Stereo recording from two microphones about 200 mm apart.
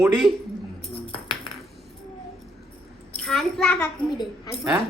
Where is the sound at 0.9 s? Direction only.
25° left (ahead or behind).